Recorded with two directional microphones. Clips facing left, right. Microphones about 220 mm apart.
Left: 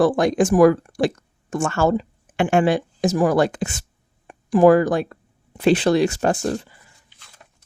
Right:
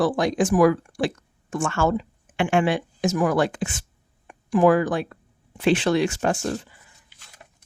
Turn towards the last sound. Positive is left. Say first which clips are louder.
# left 3 dB
turn(degrees=35)  # may be behind; listen again after turning